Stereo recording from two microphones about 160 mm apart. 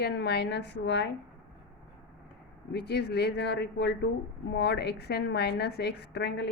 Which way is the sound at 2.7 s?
90° left.